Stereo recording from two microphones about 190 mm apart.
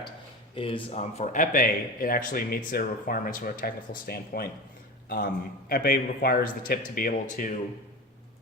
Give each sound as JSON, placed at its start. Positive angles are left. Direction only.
{"t": 0.5, "sound": "speech", "side_deg": 30}